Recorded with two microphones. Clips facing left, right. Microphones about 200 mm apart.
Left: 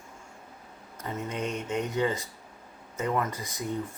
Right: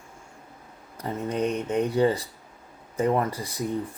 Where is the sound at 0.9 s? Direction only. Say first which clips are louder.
Right 6 dB; 35° right (ahead or behind).